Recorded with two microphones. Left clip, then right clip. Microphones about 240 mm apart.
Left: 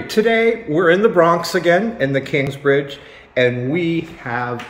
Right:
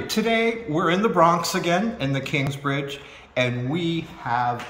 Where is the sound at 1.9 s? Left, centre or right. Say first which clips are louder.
Left 8 dB; right.